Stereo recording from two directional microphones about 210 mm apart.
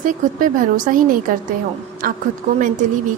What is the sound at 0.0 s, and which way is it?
Speech, 40° right (ahead or behind).